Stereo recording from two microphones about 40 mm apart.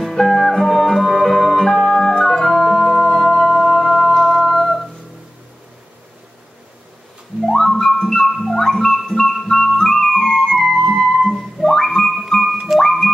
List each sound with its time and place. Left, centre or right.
0.0 s music: centre
2.3 s organ: centre
3.6 s humming: centre
7.5 s music: centre
9.5 s flute: centre
11.8 s music: centre
12.4 s music: centre